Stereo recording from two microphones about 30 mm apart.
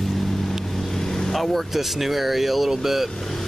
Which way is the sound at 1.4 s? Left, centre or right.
Centre.